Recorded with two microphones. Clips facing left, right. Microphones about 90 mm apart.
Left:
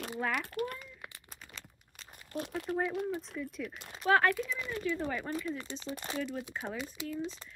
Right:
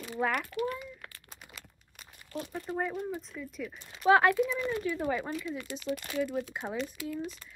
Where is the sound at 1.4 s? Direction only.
10° right (ahead or behind).